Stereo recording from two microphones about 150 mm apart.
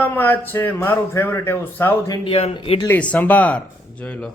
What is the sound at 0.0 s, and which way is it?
A man's voice, 10° left (ahead or behind).